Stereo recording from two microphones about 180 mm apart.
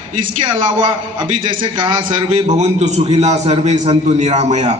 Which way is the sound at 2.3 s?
40° right (ahead or behind).